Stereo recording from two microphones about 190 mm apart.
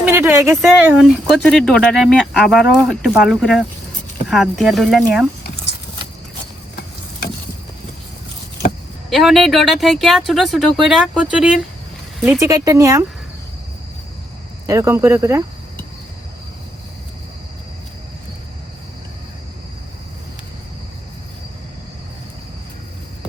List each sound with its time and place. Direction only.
0.1 s a sound: 15° right (ahead or behind)
0.5 s speech: 5° right (ahead or behind)
9.0 s speech: centre (ahead or behind)
12.4 s speech: 20° right (ahead or behind)
14.7 s speech: 15° right (ahead or behind)